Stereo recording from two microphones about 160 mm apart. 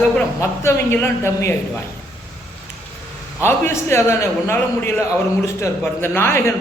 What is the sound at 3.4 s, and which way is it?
A man's voice, 15° left (ahead or behind).